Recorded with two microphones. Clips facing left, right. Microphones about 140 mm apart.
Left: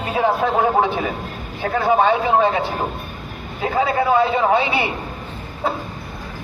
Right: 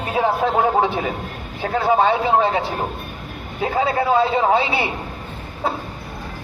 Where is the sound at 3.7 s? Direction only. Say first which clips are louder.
Left 1 dB; 30° right (ahead or behind).